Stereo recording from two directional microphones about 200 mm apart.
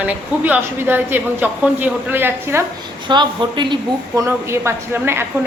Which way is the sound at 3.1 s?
25° right (ahead or behind).